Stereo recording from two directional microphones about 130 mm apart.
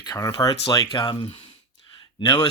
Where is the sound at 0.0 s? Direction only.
30° left (ahead or behind).